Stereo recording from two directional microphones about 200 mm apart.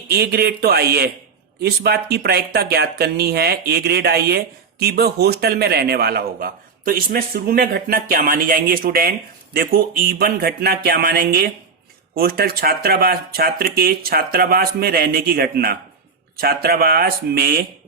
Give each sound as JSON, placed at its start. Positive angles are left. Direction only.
{"t": 0.1, "sound": "speech", "side_deg": -50}